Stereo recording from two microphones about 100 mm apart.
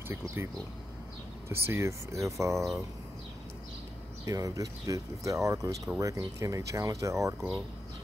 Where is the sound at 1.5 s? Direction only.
25° right (ahead or behind).